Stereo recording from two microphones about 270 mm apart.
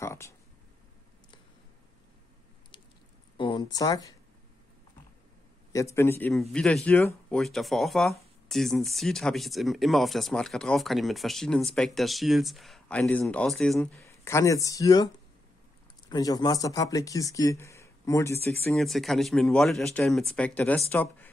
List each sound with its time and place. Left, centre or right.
0.0 s speech: centre
3.3 s speech: centre
5.7 s speech: centre
16.1 s speech: centre